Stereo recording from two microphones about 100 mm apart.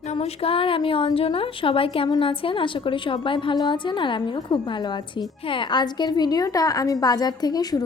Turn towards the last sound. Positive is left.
turn(degrees=40)  # may be behind; listen again after turning